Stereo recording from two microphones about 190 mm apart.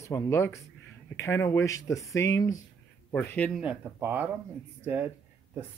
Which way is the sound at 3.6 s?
10° right (ahead or behind).